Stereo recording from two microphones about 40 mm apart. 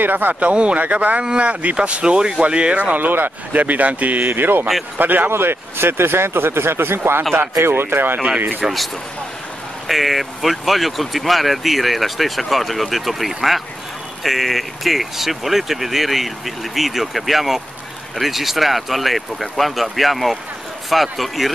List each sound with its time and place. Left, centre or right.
0.0 s speech: right
3.0 s a man's voice: right
4.2 s a man's voice: right
5.3 s speech: right
8.6 s speech: centre
9.8 s speech: centre